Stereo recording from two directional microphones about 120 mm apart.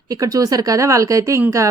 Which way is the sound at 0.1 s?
30° right (ahead or behind).